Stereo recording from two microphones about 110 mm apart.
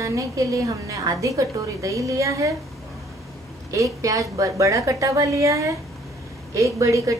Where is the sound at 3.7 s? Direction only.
30° right (ahead or behind).